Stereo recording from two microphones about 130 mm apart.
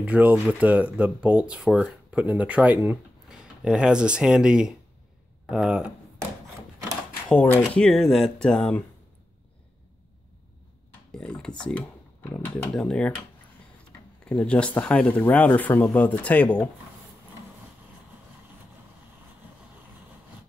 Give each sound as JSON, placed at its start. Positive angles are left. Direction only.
{"t": 0.0, "sound": "speech", "side_deg": -10}
{"t": 7.2, "sound": "speech", "side_deg": 10}
{"t": 11.1, "sound": "speech", "side_deg": 5}
{"t": 14.2, "sound": "speech", "side_deg": 10}